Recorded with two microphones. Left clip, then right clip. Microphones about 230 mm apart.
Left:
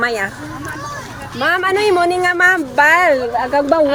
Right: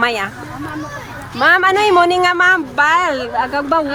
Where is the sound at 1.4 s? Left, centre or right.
Centre.